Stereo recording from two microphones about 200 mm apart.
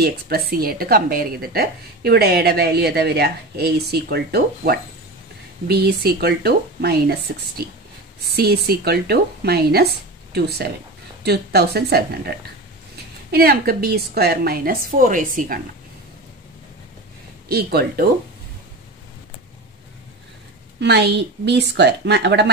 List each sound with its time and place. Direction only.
0.0 s a woman's voice: 50° right (ahead or behind)
11.2 s a woman's voice: 55° right (ahead or behind)
17.5 s a woman's voice: 50° right (ahead or behind)
20.8 s a woman's voice: 55° right (ahead or behind)